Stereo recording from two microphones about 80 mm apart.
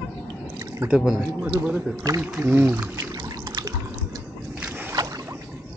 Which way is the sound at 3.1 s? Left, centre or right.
Right.